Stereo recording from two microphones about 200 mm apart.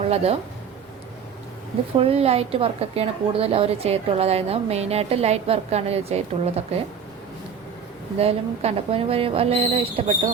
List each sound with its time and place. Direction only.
0.1 s a woman's voice: 30° right (ahead or behind)
2.0 s a woman's voice: 30° right (ahead or behind)
8.2 s speech: 30° right (ahead or behind)